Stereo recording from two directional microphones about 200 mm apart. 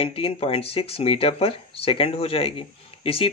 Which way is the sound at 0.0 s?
30° left (ahead or behind).